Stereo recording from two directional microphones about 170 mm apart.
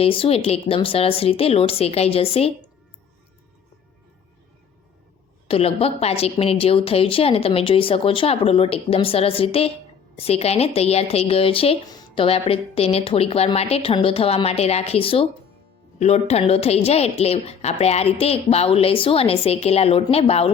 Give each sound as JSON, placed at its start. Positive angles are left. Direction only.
{"t": 0.0, "sound": "a woman's voice", "side_deg": 35}
{"t": 5.5, "sound": "a woman's voice", "side_deg": 35}